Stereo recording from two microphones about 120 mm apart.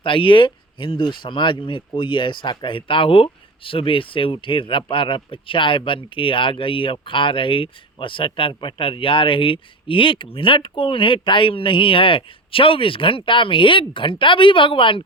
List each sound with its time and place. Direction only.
0.0 s speech: 45° left (ahead or behind)